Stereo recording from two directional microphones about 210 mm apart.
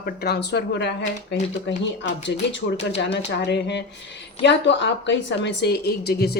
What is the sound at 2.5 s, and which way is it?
A woman's voice, 60° left (ahead or behind).